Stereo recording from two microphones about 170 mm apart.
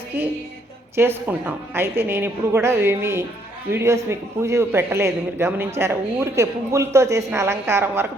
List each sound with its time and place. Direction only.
0.9 s a man's voice: 10° right (ahead or behind)